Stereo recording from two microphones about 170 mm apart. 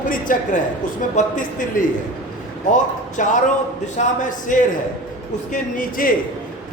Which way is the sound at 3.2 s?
45° left (ahead or behind).